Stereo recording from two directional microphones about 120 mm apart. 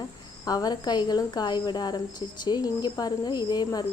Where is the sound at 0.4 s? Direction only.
35° left (ahead or behind).